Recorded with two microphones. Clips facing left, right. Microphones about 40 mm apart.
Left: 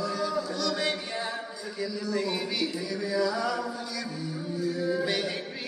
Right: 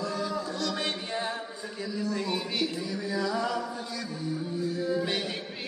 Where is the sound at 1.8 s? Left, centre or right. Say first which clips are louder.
Left 2 dB; right.